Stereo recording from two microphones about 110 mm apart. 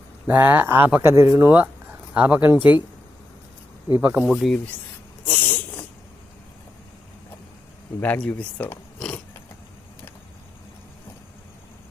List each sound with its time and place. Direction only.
0.3 s speech: 15° right (ahead or behind)
3.8 s speech: 20° right (ahead or behind)
4.3 s speech: 5° left (ahead or behind)
5.2 s a sound: 15° left (ahead or behind)
8.0 s speech: 15° left (ahead or behind)